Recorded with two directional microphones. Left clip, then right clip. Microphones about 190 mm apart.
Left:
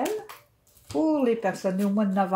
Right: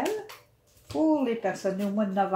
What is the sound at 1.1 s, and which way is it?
Speech, 50° left (ahead or behind).